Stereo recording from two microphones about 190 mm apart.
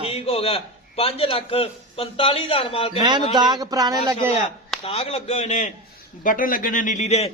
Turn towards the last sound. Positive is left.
turn(degrees=35)  # may be behind; listen again after turning